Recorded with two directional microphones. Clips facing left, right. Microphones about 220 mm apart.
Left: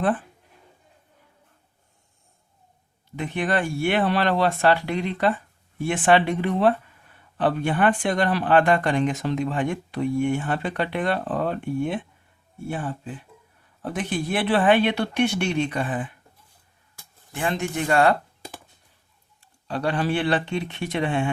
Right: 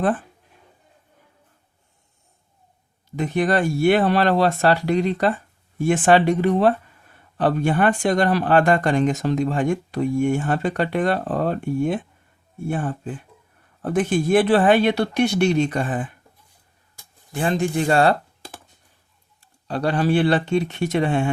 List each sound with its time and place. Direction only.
3.2 s speech: 40° right (ahead or behind)
17.3 s speech: 35° right (ahead or behind)
19.6 s speech: 40° right (ahead or behind)